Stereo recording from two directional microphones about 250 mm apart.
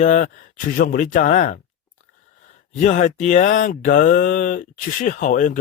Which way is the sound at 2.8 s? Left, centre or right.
Left.